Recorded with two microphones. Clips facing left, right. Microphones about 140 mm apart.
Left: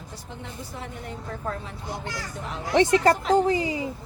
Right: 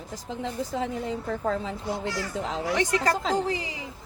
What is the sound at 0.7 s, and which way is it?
Speech, 90° right.